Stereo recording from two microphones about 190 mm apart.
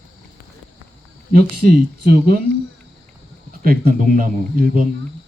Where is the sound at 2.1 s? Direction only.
50° right (ahead or behind).